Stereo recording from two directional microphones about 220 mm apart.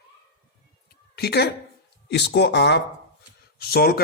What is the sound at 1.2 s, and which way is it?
A man's voice, 45° left (ahead or behind).